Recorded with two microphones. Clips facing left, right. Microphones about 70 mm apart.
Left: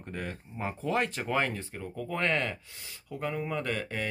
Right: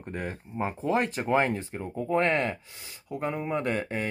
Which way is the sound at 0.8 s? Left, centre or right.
Right.